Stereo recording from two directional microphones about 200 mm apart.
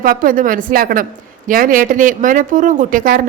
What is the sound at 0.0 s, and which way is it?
Speech, 45° right (ahead or behind).